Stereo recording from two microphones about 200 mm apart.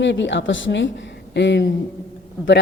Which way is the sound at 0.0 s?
65° left (ahead or behind).